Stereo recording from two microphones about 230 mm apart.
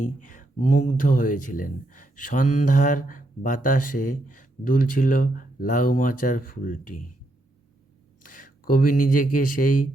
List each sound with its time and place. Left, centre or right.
0.2 s speech: left
8.2 s speech: left